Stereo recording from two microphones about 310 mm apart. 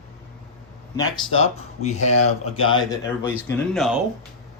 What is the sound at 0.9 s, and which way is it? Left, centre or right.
Speech, centre.